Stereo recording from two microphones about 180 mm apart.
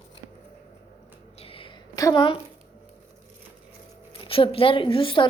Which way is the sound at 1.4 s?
30° left (ahead or behind).